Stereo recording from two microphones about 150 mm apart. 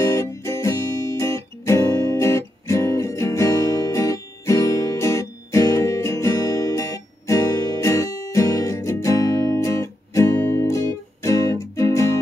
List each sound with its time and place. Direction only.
0.0 s music: 20° left (ahead or behind)